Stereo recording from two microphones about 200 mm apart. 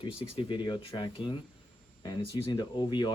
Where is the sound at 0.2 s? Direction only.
25° left (ahead or behind).